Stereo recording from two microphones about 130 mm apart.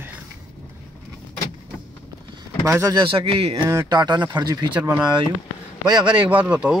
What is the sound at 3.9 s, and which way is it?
Speech, 35° right (ahead or behind).